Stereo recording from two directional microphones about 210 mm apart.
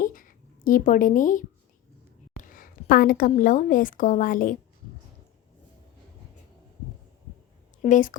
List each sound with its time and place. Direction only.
0.0 s a sound: 40° left (ahead or behind)
2.4 s a woman's voice: 40° left (ahead or behind)
7.8 s a woman's voice: 35° left (ahead or behind)